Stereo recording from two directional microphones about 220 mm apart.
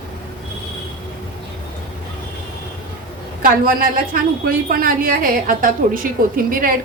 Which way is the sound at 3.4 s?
40° right (ahead or behind).